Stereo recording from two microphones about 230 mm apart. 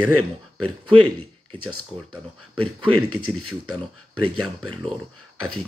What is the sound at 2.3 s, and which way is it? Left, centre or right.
Speech, right.